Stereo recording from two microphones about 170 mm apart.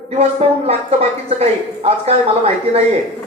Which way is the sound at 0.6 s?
35° right (ahead or behind).